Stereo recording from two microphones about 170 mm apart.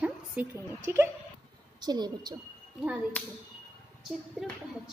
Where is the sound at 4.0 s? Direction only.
Centre (ahead or behind).